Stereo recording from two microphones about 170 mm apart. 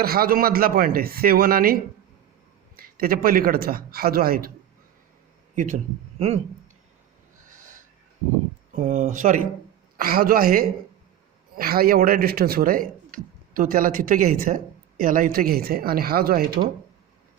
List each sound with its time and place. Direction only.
0.0 s speech: 60° right (ahead or behind)
5.5 s speech: 45° right (ahead or behind)
8.7 s speech: 45° right (ahead or behind)